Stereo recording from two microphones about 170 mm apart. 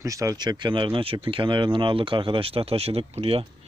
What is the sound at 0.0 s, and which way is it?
Speech, 20° right (ahead or behind).